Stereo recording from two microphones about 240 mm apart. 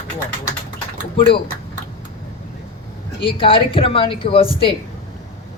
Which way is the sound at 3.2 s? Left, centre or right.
Left.